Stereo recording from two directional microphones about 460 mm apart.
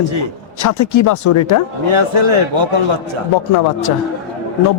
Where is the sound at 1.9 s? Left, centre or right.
Right.